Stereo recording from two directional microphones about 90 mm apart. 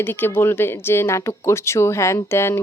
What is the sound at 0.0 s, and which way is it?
Speech, 25° left (ahead or behind).